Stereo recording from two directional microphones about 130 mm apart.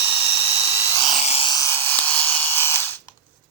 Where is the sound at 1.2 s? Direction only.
55° left (ahead or behind).